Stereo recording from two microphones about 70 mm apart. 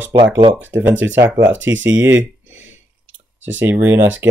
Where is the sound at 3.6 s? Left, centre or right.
Right.